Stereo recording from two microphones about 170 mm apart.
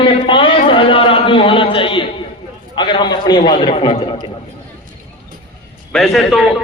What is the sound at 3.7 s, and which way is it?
Speech, 35° left (ahead or behind).